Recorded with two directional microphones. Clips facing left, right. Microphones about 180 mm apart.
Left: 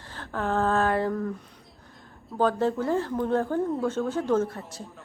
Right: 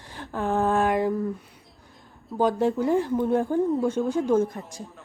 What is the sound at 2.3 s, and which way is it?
A woman's voice, 15° right (ahead or behind).